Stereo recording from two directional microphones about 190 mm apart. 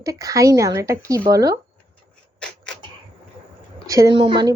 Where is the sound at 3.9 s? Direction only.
20° right (ahead or behind).